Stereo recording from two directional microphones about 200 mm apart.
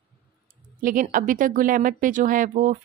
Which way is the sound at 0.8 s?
45° right (ahead or behind).